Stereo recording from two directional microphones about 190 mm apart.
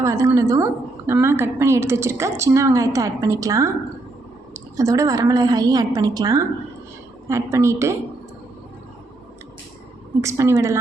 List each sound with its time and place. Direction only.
0.0 s a woman's voice: 15° right (ahead or behind)
10.2 s a woman's voice: 15° right (ahead or behind)